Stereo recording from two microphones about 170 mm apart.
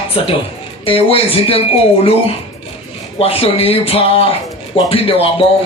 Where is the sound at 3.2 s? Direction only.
35° left (ahead or behind).